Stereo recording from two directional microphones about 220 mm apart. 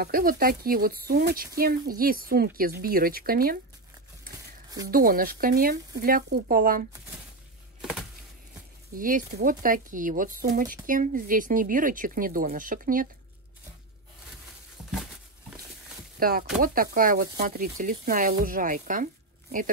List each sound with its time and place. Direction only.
0.0 s speech: 40° right (ahead or behind)
4.8 s speech: 40° right (ahead or behind)
8.9 s speech: 40° right (ahead or behind)
16.2 s speech: 40° right (ahead or behind)